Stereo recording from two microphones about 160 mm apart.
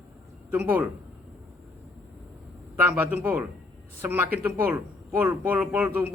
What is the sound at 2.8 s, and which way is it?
Speech, 10° right (ahead or behind).